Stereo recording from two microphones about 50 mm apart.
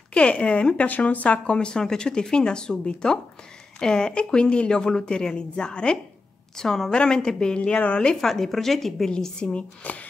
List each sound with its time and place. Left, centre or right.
0.1 s speech: left
8.2 s a woman's voice: centre
9.1 s speech: centre